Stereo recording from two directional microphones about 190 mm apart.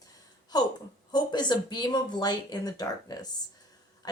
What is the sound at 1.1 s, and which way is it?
Speech, 20° left (ahead or behind).